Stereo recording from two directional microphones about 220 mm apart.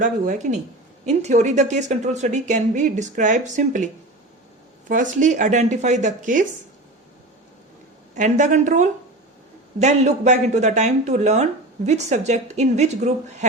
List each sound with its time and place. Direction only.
0.0 s a woman's voice: 35° right (ahead or behind)
4.9 s a woman's voice: 35° right (ahead or behind)
8.1 s a woman's voice: 35° right (ahead or behind)